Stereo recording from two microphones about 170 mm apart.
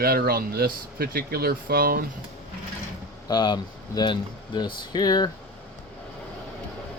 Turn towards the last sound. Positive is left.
turn(degrees=25)  # may be behind; listen again after turning